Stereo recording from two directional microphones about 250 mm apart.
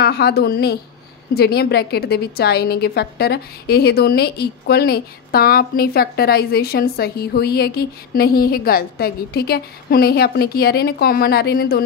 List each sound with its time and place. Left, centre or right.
0.0 s a woman's voice: left